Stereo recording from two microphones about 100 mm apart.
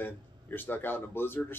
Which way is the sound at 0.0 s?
20° left (ahead or behind).